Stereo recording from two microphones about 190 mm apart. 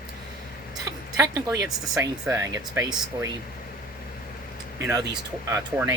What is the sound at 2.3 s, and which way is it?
Speech, 15° right (ahead or behind).